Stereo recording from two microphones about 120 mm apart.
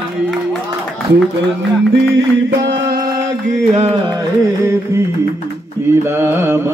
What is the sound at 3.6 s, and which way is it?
Music, 60° right (ahead or behind).